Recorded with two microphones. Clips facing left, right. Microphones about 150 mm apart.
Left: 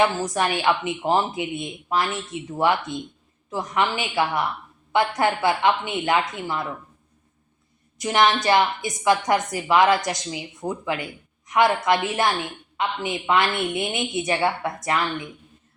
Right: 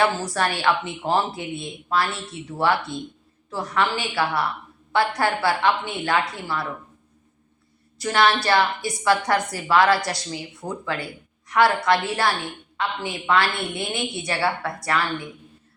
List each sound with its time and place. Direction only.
0.0 s a woman's voice: 15° left (ahead or behind)
7.9 s a woman's voice: 20° left (ahead or behind)